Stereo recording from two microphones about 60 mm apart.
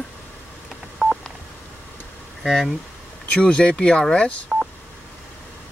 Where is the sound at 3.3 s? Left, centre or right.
Centre.